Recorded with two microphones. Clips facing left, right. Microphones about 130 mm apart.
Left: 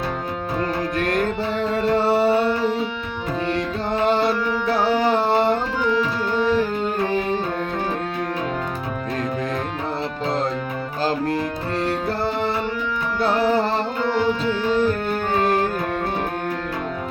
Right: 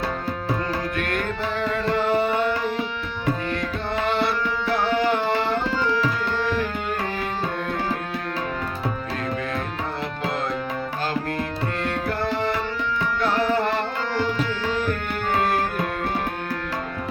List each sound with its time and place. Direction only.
0.9 s tabla: 40° left (ahead or behind)
1.7 s music: 35° left (ahead or behind)
4.0 s tabla: 40° left (ahead or behind)
4.9 s music: 35° left (ahead or behind)
5.8 s tabla: 15° left (ahead or behind)
11.8 s tabla: 35° left (ahead or behind)
13.2 s music: 35° left (ahead or behind)
14.1 s tabla: 15° left (ahead or behind)